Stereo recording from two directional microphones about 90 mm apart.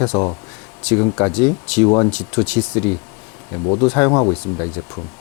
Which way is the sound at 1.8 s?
30° left (ahead or behind).